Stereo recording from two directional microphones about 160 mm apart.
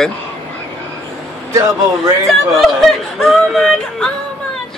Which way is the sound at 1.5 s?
20° right (ahead or behind).